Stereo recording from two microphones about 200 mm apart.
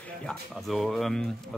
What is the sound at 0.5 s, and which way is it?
Speech, centre (ahead or behind).